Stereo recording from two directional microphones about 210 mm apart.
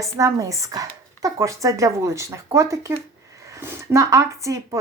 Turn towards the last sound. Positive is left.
turn(degrees=-15)  # may be behind; listen again after turning